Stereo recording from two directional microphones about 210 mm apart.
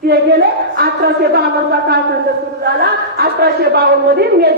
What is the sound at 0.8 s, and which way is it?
A woman's voice, 50° right (ahead or behind).